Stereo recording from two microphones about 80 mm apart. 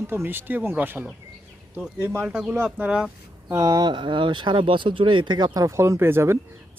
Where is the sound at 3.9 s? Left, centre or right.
Right.